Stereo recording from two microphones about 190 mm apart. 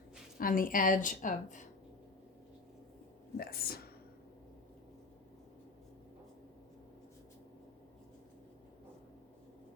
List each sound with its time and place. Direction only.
0.3 s a woman's voice: 45° left (ahead or behind)
3.3 s a woman's voice: 50° left (ahead or behind)